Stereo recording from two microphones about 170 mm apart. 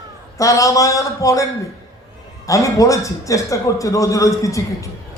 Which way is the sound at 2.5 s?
20° left (ahead or behind).